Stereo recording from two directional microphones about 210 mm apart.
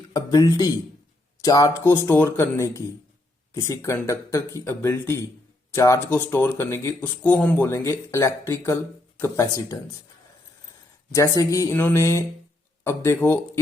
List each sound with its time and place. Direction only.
0.1 s speech: 15° left (ahead or behind)
11.1 s speech: 15° left (ahead or behind)